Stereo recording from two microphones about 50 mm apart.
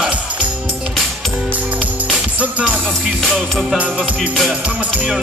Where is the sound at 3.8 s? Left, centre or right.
Right.